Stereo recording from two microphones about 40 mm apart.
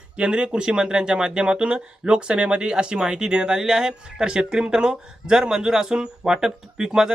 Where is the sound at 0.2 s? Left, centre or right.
Right.